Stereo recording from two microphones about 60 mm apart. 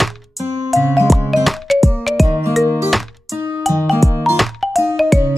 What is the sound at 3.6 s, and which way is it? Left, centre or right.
Music, centre.